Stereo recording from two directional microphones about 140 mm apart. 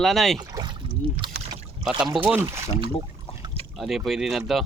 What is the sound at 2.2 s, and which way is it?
Speech, 15° right (ahead or behind).